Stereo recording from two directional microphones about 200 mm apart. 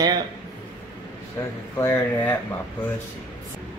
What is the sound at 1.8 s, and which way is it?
Speech, 10° left (ahead or behind).